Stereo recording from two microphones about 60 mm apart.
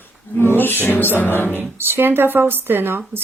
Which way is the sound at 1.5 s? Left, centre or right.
Right.